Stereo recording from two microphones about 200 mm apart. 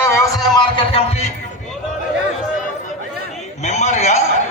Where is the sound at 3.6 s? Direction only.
35° left (ahead or behind).